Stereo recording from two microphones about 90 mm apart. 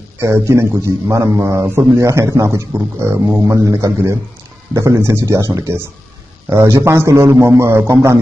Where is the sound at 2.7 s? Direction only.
25° right (ahead or behind).